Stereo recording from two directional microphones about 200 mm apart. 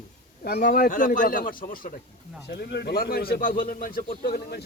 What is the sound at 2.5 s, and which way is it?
A man's voice, 55° left (ahead or behind).